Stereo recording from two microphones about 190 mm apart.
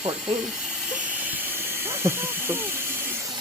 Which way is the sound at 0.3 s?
Centre (ahead or behind).